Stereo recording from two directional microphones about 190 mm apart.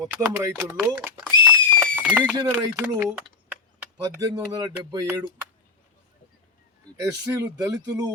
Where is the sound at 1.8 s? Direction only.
10° right (ahead or behind).